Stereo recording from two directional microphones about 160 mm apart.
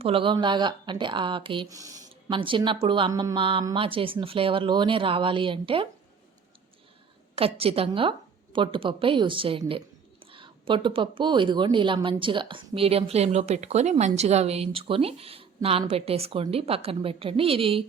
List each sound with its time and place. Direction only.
0.0 s a woman's voice: 35° right (ahead or behind)
7.3 s a woman's voice: 35° right (ahead or behind)